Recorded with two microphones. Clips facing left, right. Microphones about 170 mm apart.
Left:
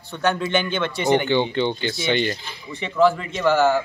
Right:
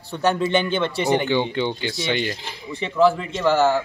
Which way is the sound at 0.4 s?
35° right (ahead or behind).